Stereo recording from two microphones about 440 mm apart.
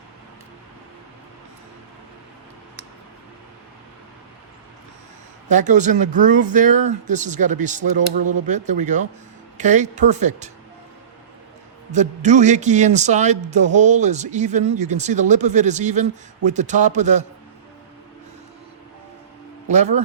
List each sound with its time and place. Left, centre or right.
5.5 s a man's voice: centre
11.9 s a man's voice: centre
19.6 s a man's voice: centre